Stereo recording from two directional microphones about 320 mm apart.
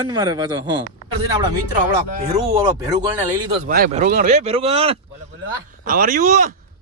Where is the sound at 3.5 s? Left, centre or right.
Right.